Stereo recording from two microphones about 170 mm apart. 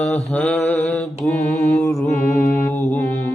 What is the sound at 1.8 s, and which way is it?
Mantra, 15° left (ahead or behind).